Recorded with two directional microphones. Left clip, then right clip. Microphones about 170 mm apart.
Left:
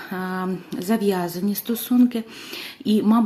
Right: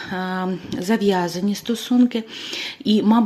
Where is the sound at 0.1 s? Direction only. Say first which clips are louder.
Right 2 dB; 20° right (ahead or behind).